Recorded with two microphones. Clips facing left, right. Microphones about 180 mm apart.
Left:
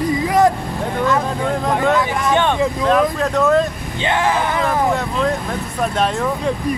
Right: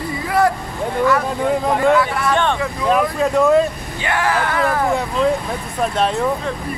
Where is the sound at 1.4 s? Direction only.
5° right (ahead or behind).